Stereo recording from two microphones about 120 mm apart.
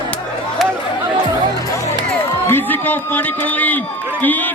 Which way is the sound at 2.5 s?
15° left (ahead or behind).